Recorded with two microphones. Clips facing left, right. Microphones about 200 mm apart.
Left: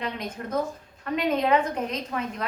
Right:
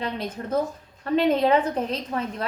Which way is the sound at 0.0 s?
30° right (ahead or behind).